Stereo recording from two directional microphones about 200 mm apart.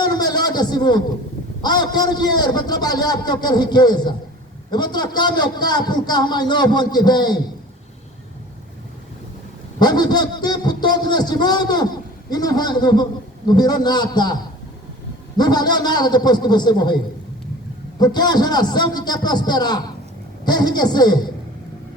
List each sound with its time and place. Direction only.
0.0 s a sound: 20° left (ahead or behind)
1.6 s a man's voice: 20° left (ahead or behind)
9.7 s a man's voice: 20° left (ahead or behind)
15.4 s a man's voice: 20° left (ahead or behind)
18.0 s a man's voice: 20° left (ahead or behind)